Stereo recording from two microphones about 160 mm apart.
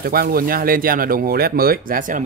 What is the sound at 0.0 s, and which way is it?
Speech, 70° right (ahead or behind).